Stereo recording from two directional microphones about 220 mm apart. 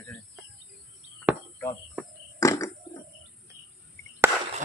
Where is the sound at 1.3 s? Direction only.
10° right (ahead or behind).